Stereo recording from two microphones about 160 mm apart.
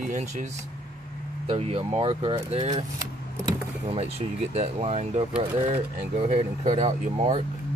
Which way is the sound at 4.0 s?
40° right (ahead or behind).